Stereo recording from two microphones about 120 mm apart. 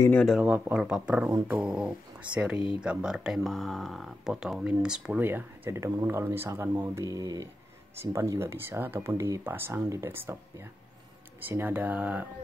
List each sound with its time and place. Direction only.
0.1 s speech: 5° left (ahead or behind)
0.4 s speech: 10° right (ahead or behind)
2.3 s speech: 10° right (ahead or behind)
11.4 s speech: 15° right (ahead or behind)